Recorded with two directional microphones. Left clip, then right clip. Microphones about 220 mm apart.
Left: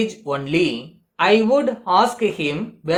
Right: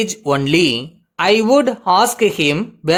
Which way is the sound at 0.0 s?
50° right (ahead or behind).